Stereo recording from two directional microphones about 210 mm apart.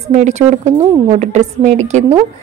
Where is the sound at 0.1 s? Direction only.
35° right (ahead or behind).